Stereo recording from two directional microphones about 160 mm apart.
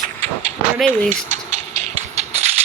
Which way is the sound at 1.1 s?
50° right (ahead or behind).